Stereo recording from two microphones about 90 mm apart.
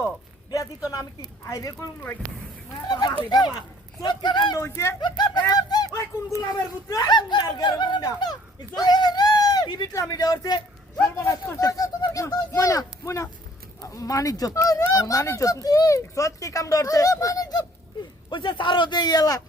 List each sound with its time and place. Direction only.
0.9 s speech: 50° left (ahead or behind)
2.9 s a man's voice: 50° left (ahead or behind)
4.6 s speech: 30° left (ahead or behind)
4.9 s a sound: 50° left (ahead or behind)
6.8 s speech: 45° left (ahead or behind)
9.9 s speech: 40° left (ahead or behind)
11.2 s speech: 30° left (ahead or behind)
18.3 s a man's voice: 65° left (ahead or behind); by 19.4 s 45° left (ahead or behind)